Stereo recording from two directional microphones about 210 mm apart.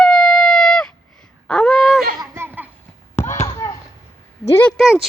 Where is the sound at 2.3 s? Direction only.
10° right (ahead or behind).